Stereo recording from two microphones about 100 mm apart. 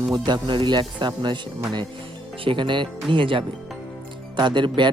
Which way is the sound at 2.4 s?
55° right (ahead or behind).